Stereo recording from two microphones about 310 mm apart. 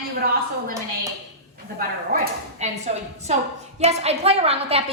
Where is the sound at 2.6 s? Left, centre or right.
Right.